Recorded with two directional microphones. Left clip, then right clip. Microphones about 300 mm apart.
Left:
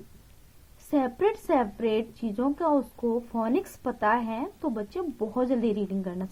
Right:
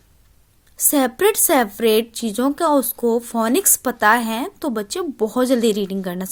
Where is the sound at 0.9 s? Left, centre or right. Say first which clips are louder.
Right 8 dB; right.